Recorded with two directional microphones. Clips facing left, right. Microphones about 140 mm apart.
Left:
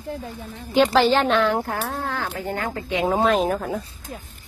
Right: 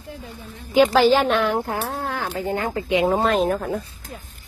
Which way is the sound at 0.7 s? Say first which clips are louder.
Right 2 dB; 5° right (ahead or behind).